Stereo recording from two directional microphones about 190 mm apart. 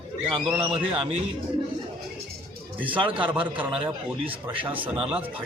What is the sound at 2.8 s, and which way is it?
Speech, 25° right (ahead or behind).